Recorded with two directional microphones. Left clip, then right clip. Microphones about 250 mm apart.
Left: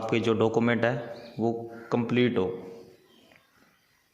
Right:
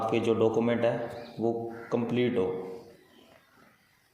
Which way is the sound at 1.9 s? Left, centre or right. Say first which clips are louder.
Left 2 dB; left.